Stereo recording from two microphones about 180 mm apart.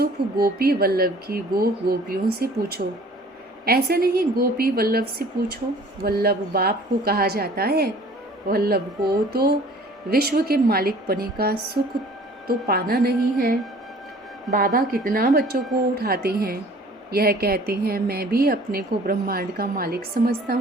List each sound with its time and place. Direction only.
0.0 s a woman's voice: 60° right (ahead or behind)